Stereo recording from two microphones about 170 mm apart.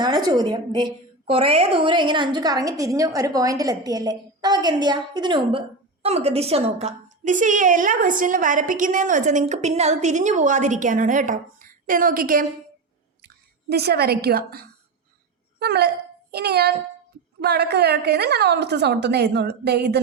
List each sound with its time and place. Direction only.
0.0 s a woman's voice: 25° right (ahead or behind); by 12.5 s 55° right (ahead or behind)
13.2 s a woman's voice: 70° right (ahead or behind)